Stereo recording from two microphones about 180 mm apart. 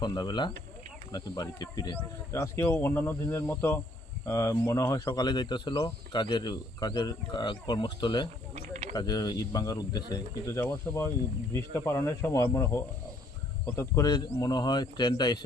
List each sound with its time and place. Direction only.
0.0 s speech: 25° left (ahead or behind)
8.5 s mechanisms: 40° right (ahead or behind)
8.9 s speech: 20° left (ahead or behind)